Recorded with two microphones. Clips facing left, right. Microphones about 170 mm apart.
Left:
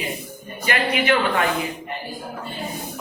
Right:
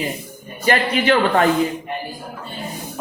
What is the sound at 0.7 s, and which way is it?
Speech, 40° right (ahead or behind).